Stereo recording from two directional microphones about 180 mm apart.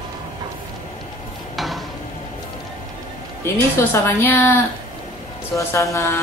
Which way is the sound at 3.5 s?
10° left (ahead or behind).